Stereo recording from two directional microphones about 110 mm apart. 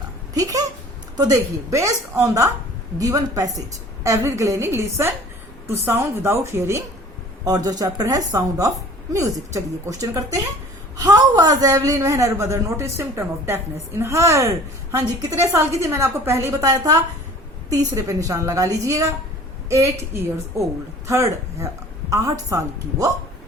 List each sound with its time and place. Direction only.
0.3 s a woman's voice: 35° right (ahead or behind)
7.4 s a woman's voice: 35° right (ahead or behind)